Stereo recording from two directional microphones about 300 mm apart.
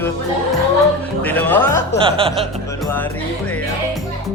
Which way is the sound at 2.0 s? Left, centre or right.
Centre.